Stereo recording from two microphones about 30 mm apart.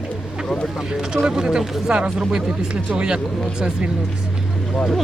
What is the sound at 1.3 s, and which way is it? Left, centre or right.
Speech, right.